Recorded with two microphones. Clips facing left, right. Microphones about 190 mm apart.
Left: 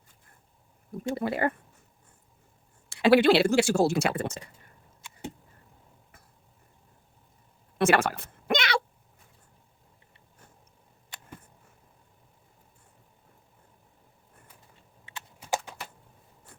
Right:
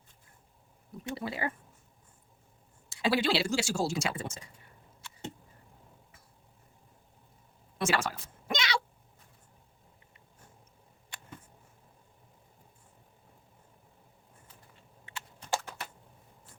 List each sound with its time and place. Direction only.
1.1 s speech: 55° left (ahead or behind)
2.9 s speech: 65° left (ahead or behind)
7.8 s a sound: 60° left (ahead or behind)
15.4 s clip-clop: 10° left (ahead or behind)